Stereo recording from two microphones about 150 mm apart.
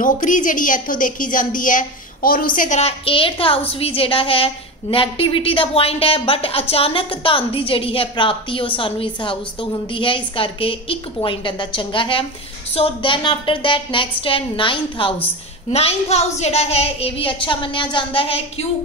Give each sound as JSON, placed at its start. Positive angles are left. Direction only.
{"t": 0.0, "sound": "a woman's voice", "side_deg": 60}
{"t": 2.8, "sound": "a woman's voice", "side_deg": 40}